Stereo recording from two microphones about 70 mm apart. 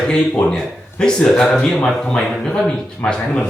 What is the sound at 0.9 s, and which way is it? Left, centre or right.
Speech, centre.